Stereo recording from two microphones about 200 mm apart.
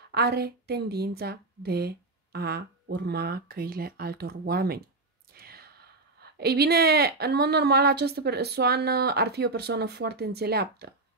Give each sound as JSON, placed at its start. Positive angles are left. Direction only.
{"t": 0.1, "sound": "speech", "side_deg": -55}